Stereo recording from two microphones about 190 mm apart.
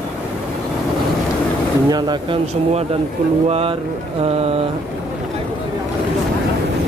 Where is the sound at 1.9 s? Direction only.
20° right (ahead or behind).